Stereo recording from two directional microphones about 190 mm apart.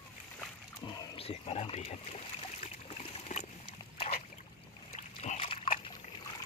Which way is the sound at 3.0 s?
35° left (ahead or behind).